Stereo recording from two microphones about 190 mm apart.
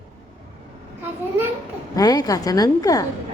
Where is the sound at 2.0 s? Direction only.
20° left (ahead or behind).